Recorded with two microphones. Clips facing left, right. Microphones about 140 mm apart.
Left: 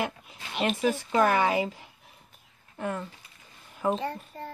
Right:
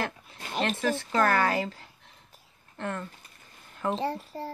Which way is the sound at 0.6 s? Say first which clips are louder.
Left 1 dB; 10° left (ahead or behind).